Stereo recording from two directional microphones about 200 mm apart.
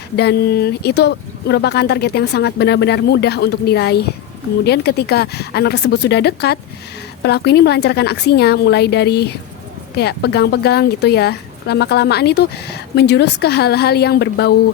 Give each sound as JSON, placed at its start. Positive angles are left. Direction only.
{"t": 0.2, "sound": "speech", "side_deg": 55}